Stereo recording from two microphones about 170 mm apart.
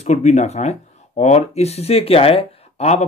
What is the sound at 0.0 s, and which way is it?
Speech, 40° left (ahead or behind).